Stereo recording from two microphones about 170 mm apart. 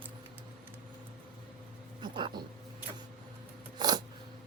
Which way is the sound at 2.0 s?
25° right (ahead or behind).